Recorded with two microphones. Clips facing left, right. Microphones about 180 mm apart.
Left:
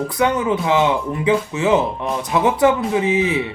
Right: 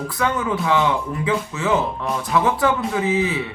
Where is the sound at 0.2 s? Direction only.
20° left (ahead or behind).